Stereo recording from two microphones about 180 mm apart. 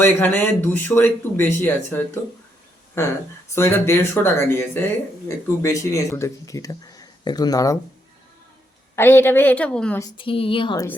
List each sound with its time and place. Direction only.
0.0 s speech: 10° left (ahead or behind)
3.5 s speech: 15° left (ahead or behind)
9.0 s speech: 10° left (ahead or behind)
10.0 s a woman's voice: 25° left (ahead or behind)